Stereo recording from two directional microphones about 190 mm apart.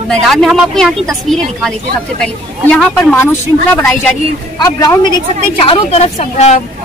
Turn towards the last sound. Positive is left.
turn(degrees=35)  # may be behind; listen again after turning